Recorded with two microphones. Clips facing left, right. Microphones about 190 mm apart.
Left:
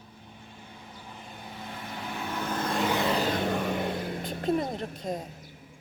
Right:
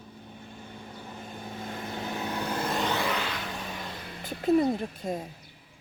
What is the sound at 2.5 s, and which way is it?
Vehicle, 5° right (ahead or behind).